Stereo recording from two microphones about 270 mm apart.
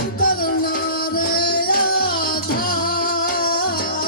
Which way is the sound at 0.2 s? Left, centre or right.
Left.